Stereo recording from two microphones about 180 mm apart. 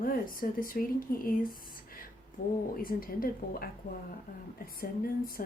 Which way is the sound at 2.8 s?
55° left (ahead or behind).